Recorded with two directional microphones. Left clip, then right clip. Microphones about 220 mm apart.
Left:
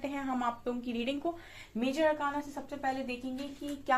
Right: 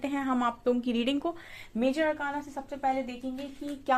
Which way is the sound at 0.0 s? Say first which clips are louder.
Right 5 dB; 50° right (ahead or behind).